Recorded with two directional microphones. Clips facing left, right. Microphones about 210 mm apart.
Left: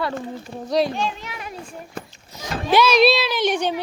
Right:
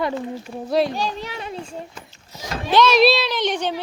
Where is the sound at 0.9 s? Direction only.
35° right (ahead or behind).